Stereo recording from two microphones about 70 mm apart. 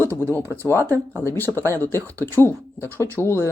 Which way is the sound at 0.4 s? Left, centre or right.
Right.